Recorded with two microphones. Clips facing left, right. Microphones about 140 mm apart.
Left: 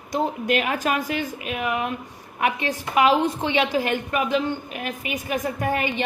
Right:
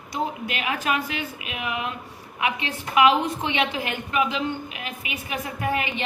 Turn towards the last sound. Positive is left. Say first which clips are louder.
# left 2 dB
turn(degrees=40)  # may be behind; listen again after turning